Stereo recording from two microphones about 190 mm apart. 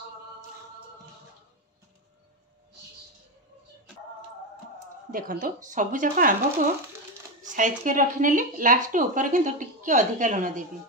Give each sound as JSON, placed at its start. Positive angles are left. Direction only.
{"t": 5.1, "sound": "a woman's voice", "side_deg": -45}
{"t": 7.4, "sound": "a woman's voice", "side_deg": -40}